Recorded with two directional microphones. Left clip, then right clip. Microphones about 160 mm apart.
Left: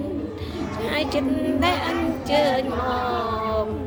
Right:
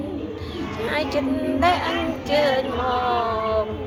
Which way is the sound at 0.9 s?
75° left (ahead or behind).